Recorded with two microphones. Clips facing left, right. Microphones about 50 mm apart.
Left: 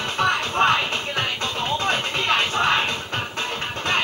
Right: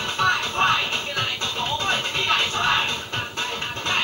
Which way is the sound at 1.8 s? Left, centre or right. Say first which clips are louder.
Left 1 dB; left.